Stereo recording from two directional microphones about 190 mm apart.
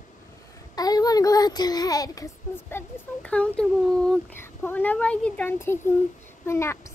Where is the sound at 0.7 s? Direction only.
20° left (ahead or behind).